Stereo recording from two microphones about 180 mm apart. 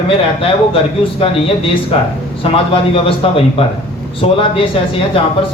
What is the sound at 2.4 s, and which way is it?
Speech, 30° left (ahead or behind).